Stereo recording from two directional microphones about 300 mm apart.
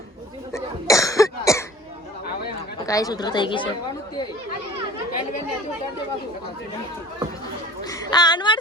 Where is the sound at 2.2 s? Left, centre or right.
Left.